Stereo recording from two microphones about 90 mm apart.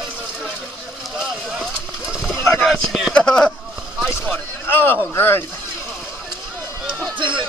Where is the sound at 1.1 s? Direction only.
5° right (ahead or behind).